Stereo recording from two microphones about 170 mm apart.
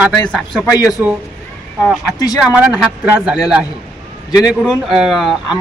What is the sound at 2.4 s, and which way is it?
Speech, 5° right (ahead or behind).